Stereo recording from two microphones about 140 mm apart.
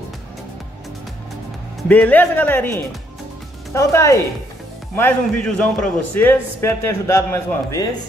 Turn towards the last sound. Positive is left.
turn(degrees=20)  # may be behind; listen again after turning